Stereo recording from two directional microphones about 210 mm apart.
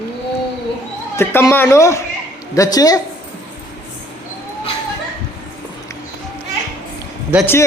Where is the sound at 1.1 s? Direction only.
10° left (ahead or behind).